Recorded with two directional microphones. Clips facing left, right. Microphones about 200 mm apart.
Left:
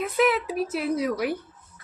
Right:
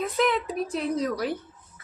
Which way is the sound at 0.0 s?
5° left (ahead or behind).